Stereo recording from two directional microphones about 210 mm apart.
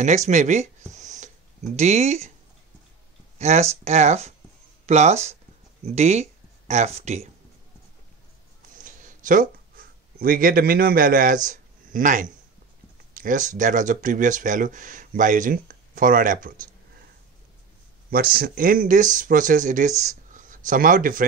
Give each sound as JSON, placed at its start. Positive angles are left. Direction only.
{"t": 0.0, "sound": "speech", "side_deg": -35}
{"t": 3.3, "sound": "speech", "side_deg": -30}
{"t": 9.0, "sound": "speech", "side_deg": -40}
{"t": 18.1, "sound": "speech", "side_deg": -45}